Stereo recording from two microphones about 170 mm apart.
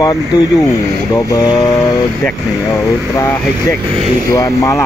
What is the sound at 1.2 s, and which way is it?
Speech, 20° left (ahead or behind).